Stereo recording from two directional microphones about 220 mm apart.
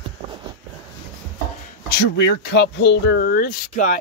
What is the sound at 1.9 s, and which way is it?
Speech, 45° left (ahead or behind).